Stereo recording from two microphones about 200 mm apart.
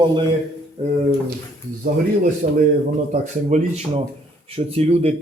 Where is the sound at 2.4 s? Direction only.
45° right (ahead or behind).